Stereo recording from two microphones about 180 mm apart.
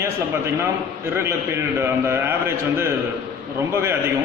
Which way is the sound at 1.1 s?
15° right (ahead or behind).